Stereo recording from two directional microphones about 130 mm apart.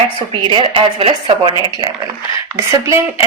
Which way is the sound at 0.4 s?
45° right (ahead or behind).